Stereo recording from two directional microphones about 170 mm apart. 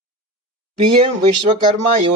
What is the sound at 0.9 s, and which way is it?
Speech, 35° right (ahead or behind).